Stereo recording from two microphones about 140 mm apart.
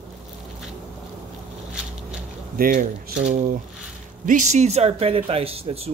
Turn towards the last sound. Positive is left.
turn(degrees=-45)  # may be behind; listen again after turning